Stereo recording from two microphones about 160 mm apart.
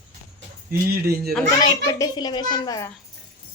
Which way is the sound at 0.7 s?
70° right (ahead or behind).